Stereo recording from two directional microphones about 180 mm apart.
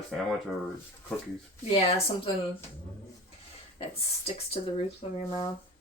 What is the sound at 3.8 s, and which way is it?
A woman's voice, 35° left (ahead or behind).